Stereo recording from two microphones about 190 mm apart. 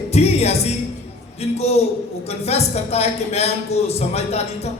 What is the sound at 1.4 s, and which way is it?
A man's voice, 35° left (ahead or behind).